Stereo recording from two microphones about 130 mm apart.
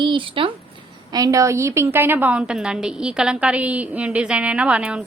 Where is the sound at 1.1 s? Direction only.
25° right (ahead or behind).